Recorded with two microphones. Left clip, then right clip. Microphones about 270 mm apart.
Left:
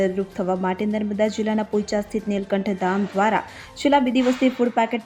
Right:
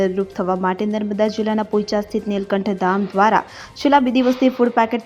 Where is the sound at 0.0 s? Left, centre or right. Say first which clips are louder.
Right 3 dB; centre.